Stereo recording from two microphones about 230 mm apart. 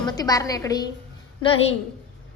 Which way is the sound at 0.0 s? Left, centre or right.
Centre.